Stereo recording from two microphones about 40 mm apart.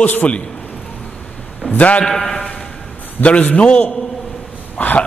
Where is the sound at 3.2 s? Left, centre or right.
Left.